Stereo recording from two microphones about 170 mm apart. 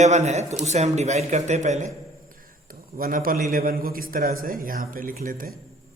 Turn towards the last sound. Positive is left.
turn(degrees=-55)  # may be behind; listen again after turning